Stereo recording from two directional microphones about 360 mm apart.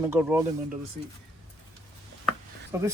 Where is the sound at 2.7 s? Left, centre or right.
Centre.